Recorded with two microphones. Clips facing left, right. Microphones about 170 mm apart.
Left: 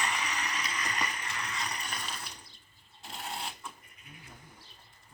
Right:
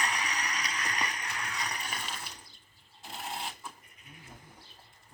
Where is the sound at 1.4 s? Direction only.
Centre (ahead or behind).